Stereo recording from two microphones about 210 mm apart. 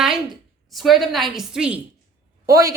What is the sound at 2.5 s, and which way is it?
Speech, 15° right (ahead or behind).